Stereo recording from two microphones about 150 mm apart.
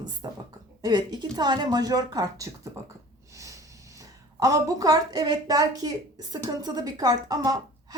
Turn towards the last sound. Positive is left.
turn(degrees=-25)  # may be behind; listen again after turning